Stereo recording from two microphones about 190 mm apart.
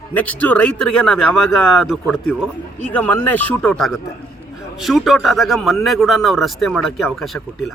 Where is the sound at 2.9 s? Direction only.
10° left (ahead or behind).